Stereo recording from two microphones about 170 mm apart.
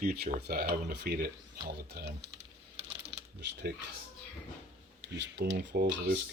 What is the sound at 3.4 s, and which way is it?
Speech, 90° right.